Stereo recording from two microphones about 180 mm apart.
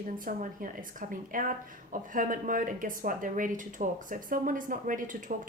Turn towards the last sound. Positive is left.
turn(degrees=-50)  # may be behind; listen again after turning